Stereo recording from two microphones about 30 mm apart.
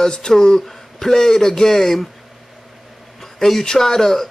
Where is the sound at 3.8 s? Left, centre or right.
Centre.